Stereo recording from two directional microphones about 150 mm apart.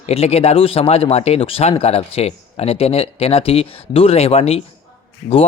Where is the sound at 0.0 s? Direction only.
40° left (ahead or behind).